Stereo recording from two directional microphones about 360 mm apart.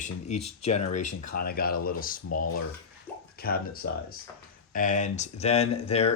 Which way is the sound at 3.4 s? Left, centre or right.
Left.